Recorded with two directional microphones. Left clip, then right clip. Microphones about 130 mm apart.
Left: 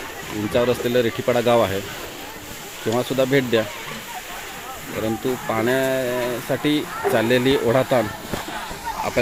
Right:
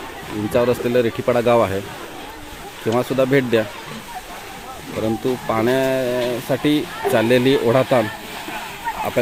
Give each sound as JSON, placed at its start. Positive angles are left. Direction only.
{"t": 0.5, "sound": "speech", "side_deg": -10}
{"t": 2.9, "sound": "speech", "side_deg": -15}
{"t": 5.0, "sound": "speech", "side_deg": -20}
{"t": 9.2, "sound": "speech", "side_deg": -5}